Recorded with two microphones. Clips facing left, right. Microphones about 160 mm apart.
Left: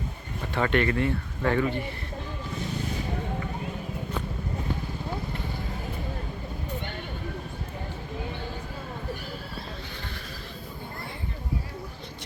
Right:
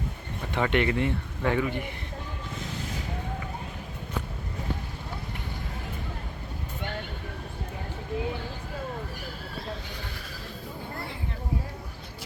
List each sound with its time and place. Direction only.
0.5 s speech: 15° right (ahead or behind)